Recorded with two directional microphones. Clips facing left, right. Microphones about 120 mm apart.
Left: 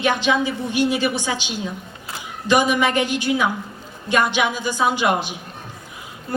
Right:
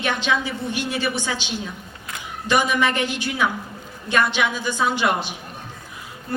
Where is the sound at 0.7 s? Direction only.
15° left (ahead or behind).